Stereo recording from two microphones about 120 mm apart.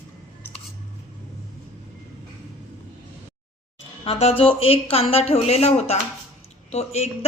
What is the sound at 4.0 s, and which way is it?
A woman's voice, 55° left (ahead or behind).